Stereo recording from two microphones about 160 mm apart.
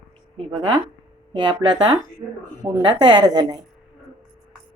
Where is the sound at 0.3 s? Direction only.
35° right (ahead or behind).